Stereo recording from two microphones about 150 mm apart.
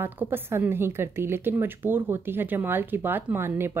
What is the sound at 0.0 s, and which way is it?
A woman's voice, 15° right (ahead or behind).